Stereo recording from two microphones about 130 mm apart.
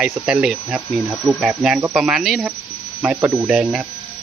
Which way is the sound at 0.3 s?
5° right (ahead or behind).